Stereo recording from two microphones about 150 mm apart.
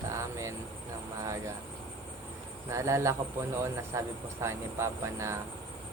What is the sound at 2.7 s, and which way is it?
Speech, 20° right (ahead or behind).